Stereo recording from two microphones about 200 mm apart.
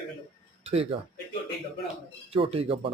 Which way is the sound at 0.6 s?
30° right (ahead or behind).